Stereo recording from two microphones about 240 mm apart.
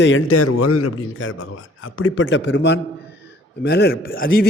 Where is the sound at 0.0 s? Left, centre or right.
Left.